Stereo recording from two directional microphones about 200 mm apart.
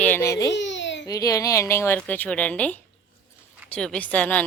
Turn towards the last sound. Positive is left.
turn(degrees=5)  # may be behind; listen again after turning